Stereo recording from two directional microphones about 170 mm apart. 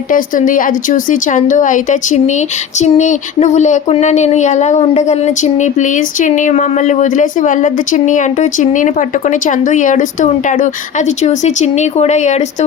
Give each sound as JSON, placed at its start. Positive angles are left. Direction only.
{"t": 0.1, "sound": "speech", "side_deg": 50}